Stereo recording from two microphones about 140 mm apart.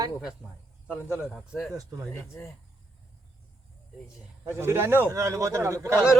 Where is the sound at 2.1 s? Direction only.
20° left (ahead or behind).